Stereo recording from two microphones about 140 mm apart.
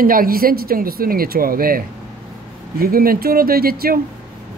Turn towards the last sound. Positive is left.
turn(degrees=-90)